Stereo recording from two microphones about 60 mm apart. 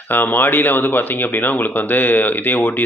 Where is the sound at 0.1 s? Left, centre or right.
Left.